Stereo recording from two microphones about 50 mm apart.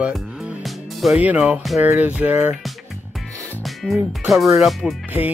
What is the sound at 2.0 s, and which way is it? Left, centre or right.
Speech, right.